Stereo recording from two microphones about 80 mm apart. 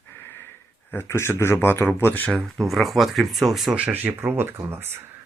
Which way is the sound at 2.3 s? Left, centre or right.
Centre.